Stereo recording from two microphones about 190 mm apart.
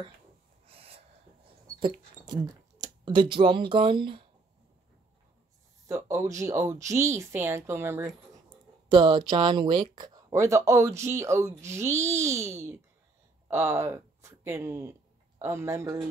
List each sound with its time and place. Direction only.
1.8 s speech: 25° right (ahead or behind)
5.9 s speech: 15° right (ahead or behind)
8.5 s speech: 25° right (ahead or behind)